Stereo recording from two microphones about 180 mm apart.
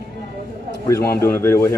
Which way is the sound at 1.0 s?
55° left (ahead or behind).